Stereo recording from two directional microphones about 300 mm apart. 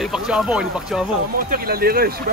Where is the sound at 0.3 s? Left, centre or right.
Centre.